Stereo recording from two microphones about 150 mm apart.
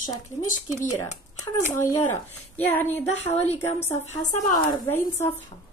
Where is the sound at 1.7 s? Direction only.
15° left (ahead or behind).